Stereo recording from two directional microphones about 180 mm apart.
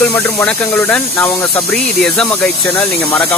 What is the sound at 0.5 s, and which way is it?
Speech, 10° left (ahead or behind).